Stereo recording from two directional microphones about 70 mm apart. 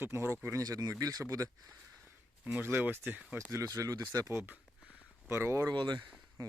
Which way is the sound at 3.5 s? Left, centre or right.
Right.